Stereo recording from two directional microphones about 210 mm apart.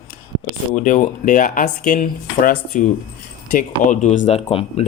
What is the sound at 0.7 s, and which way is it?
Speech, 35° left (ahead or behind).